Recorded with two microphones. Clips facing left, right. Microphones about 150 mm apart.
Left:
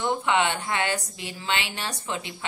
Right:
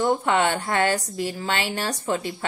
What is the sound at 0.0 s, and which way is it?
Speech, 45° right (ahead or behind).